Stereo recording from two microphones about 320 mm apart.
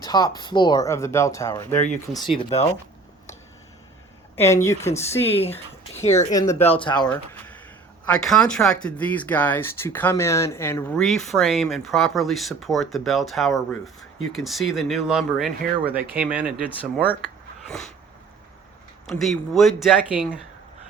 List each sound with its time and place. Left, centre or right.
0.0 s speech: centre
4.4 s speech: centre
5.5 s speech: left
6.4 s speech: centre
17.7 s a sound: centre
19.0 s speech: centre